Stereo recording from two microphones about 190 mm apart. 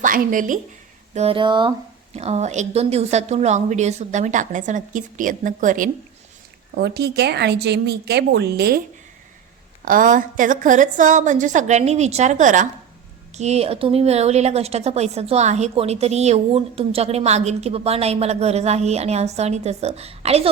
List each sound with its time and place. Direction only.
0.0 s a woman's voice: 45° right (ahead or behind)
1.1 s a woman's voice: 30° right (ahead or behind)
6.7 s a woman's voice: 60° right (ahead or behind)
9.8 s a woman's voice: 45° right (ahead or behind)